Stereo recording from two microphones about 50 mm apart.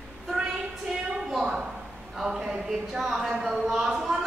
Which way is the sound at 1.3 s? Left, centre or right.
Centre.